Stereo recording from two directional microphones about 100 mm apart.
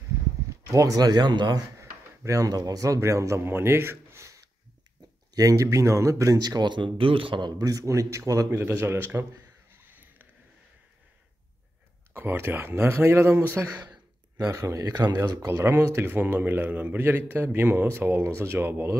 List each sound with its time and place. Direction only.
0.5 s speech: 30° right (ahead or behind)
1.8 s speech: 35° right (ahead or behind); by 7.6 s 50° right (ahead or behind)
7.6 s speech: 35° right (ahead or behind)
8.5 s speech: 20° right (ahead or behind)
9.7 s a sound: 20° right (ahead or behind)
12.1 s speech: 25° right (ahead or behind)
14.3 s speech: 35° right (ahead or behind)